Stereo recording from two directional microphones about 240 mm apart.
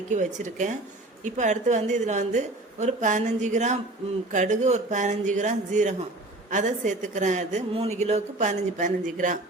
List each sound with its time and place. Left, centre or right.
0.1 s a woman's voice: right